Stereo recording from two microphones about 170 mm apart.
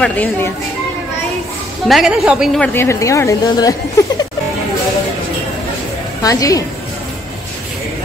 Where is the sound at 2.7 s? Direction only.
15° left (ahead or behind).